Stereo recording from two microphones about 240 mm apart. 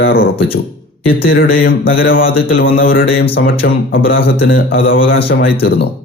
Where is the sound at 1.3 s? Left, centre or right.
Left.